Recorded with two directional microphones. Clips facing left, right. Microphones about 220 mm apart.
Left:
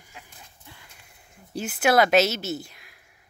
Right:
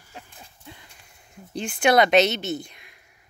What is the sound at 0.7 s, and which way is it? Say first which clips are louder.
Horse: right 6 dB; 20° right (ahead or behind).